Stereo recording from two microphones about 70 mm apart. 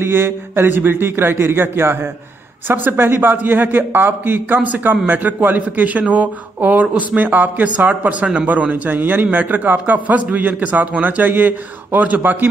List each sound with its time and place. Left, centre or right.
0.0 s a man's voice: right